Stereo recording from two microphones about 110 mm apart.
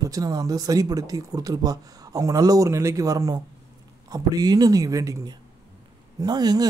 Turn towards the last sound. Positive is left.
turn(degrees=-40)  # may be behind; listen again after turning